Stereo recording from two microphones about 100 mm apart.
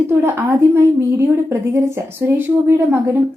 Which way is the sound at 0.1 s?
25° right (ahead or behind).